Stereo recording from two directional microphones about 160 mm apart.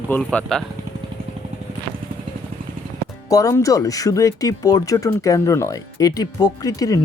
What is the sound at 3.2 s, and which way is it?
Speech, 20° left (ahead or behind).